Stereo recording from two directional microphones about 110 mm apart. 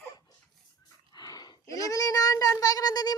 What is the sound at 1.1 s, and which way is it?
Speech, 35° left (ahead or behind).